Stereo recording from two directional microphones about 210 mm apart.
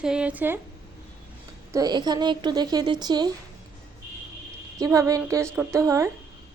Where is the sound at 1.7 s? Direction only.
20° right (ahead or behind).